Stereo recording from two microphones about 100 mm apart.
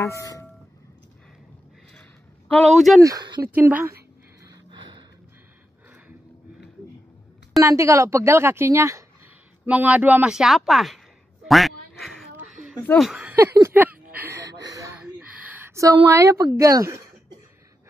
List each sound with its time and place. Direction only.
0.0 s speech: 30° left (ahead or behind)
2.0 s a sound: 10° left (ahead or behind)
2.7 s speech: centre (ahead or behind)
3.0 s speech: 35° right (ahead or behind)
3.4 s a woman's voice: 20° right (ahead or behind)
4.6 s gasp: 50° right (ahead or behind)
7.5 s a woman's voice: 30° right (ahead or behind)
9.7 s speech: 15° right (ahead or behind)
11.4 s quack: centre (ahead or behind)
13.1 s a sound: 15° right (ahead or behind)
14.4 s a sound: 35° right (ahead or behind)
15.0 s gasp: 10° right (ahead or behind)
15.7 s a sound: 35° right (ahead or behind)
16.1 s speech: 30° right (ahead or behind)